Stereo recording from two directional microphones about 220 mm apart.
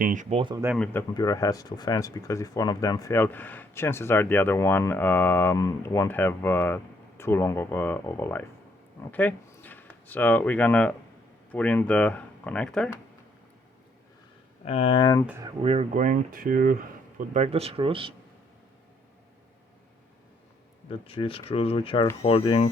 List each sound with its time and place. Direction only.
0.0 s speech: 35° right (ahead or behind)
1.1 s speech: 15° left (ahead or behind)
14.6 s speech: 30° left (ahead or behind)
15.6 s speech: 30° right (ahead or behind)
20.9 s speech: 25° left (ahead or behind)